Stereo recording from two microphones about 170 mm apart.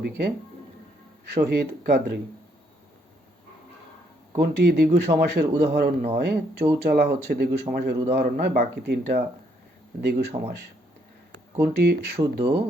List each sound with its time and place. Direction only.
1.2 s speech: 75° right (ahead or behind)
4.4 s speech: 75° right (ahead or behind)
11.6 s speech: 75° right (ahead or behind)